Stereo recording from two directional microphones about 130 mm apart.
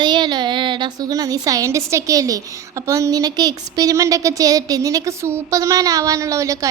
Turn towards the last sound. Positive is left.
turn(degrees=-25)  # may be behind; listen again after turning